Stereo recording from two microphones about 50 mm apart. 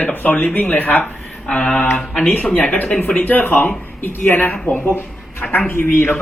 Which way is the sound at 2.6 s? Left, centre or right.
Left.